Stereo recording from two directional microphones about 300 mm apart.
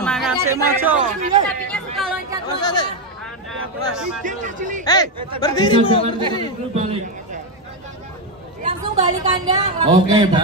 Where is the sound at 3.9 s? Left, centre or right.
Centre.